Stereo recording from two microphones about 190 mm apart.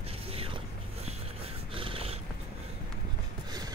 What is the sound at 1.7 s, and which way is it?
Cat, 30° right (ahead or behind).